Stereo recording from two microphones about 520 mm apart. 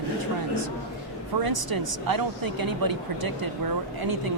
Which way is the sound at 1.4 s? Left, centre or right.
Right.